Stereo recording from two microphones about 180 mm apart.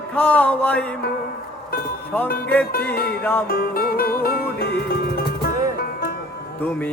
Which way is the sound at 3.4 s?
55° left (ahead or behind).